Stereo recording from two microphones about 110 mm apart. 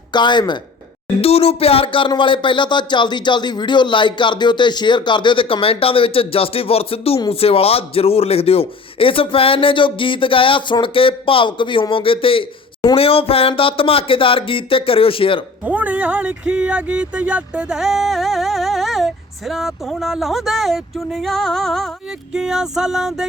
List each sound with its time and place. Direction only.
0.1 s speech: 45° left (ahead or behind)
1.2 s a man's voice: 65° left (ahead or behind)
15.6 s speech: 15° right (ahead or behind)